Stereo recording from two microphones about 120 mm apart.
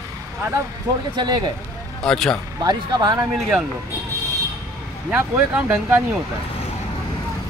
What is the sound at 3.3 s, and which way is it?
Speech, 5° right (ahead or behind).